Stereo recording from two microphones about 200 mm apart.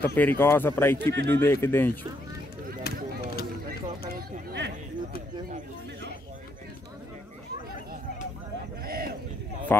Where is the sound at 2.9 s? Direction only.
50° left (ahead or behind).